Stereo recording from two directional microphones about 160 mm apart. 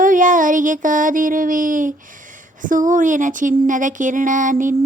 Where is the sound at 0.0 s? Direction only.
55° right (ahead or behind).